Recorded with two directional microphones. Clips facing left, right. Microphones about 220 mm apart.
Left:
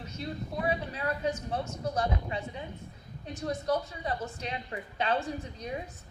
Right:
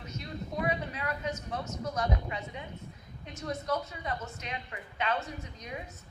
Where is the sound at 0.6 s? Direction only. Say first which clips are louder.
Left 2 dB; 35° left (ahead or behind).